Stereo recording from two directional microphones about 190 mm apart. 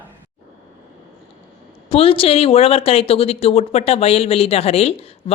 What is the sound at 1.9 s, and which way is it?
Speech, 30° left (ahead or behind).